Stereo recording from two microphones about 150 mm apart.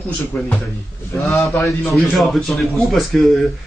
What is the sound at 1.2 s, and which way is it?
Speech, centre (ahead or behind).